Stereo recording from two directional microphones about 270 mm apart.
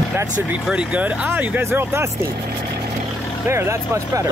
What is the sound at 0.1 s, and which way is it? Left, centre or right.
Speech, centre.